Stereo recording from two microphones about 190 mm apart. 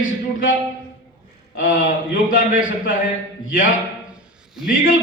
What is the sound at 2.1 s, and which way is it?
Speech, 50° left (ahead or behind).